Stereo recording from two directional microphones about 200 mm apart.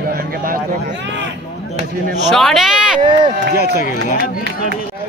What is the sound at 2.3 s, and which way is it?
Speech, centre (ahead or behind).